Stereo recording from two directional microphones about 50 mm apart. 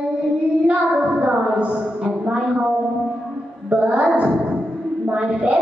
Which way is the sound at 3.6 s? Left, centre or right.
Right.